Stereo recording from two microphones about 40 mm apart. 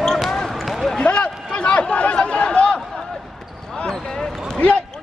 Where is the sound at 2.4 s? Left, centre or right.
Left.